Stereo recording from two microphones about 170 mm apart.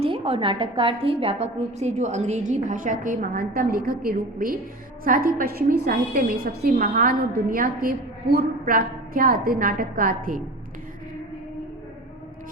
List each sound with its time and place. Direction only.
0.0 s a woman's voice: 30° right (ahead or behind); by 10.4 s 55° right (ahead or behind)